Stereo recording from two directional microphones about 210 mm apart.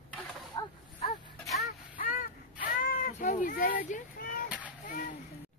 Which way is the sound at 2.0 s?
40° left (ahead or behind).